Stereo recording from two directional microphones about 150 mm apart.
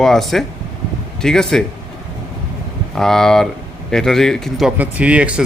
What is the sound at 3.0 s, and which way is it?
A man's voice, 5° left (ahead or behind).